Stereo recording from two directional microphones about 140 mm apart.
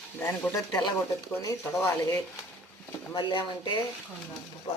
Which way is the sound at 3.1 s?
35° left (ahead or behind).